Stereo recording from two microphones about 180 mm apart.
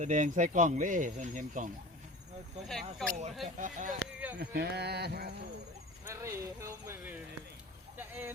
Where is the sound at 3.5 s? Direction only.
45° right (ahead or behind).